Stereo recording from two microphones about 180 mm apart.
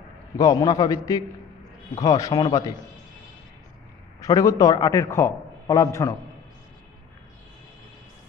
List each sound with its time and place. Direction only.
0.4 s a man's voice: 20° left (ahead or behind)
4.2 s a man's voice: 15° left (ahead or behind)